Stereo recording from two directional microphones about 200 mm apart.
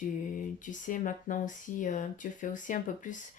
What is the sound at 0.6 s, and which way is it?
Speech, 40° left (ahead or behind).